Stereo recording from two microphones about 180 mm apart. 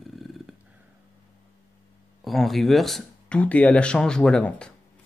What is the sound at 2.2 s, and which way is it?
Speech, centre (ahead or behind).